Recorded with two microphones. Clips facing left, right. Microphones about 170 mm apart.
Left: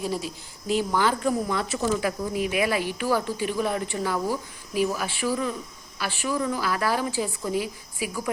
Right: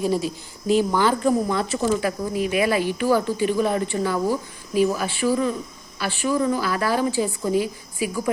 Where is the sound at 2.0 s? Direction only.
15° left (ahead or behind).